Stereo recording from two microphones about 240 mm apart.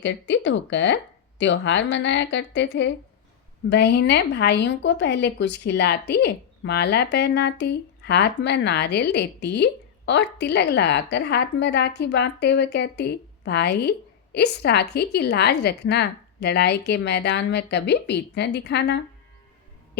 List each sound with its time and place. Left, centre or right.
0.0 s speech: left